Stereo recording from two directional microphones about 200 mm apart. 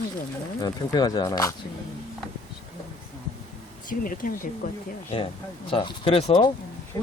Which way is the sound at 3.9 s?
45° left (ahead or behind).